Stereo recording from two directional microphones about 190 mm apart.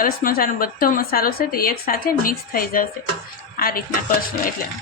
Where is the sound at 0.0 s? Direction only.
45° left (ahead or behind).